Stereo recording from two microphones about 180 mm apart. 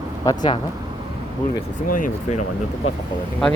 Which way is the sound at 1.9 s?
50° left (ahead or behind).